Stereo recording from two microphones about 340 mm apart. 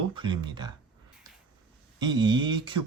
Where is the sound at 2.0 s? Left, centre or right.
Centre.